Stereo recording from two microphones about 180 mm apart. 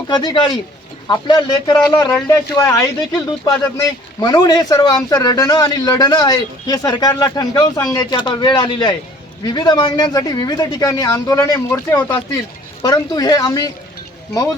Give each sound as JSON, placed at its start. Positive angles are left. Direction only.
{"t": 0.1, "sound": "speech", "side_deg": 25}